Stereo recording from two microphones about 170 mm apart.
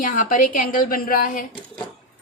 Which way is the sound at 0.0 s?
55° left (ahead or behind).